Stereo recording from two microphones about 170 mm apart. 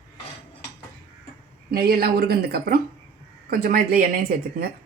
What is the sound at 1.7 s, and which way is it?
Speech, 65° right (ahead or behind).